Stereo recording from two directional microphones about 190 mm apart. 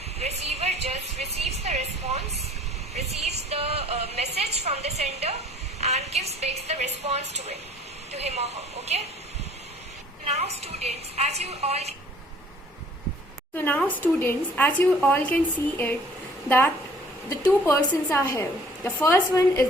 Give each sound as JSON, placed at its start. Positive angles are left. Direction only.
{"t": 0.2, "sound": "a sound", "side_deg": -35}
{"t": 5.8, "sound": "a woman's voice", "side_deg": -35}
{"t": 10.2, "sound": "a woman's voice", "side_deg": -35}
{"t": 13.7, "sound": "a woman's voice", "side_deg": 10}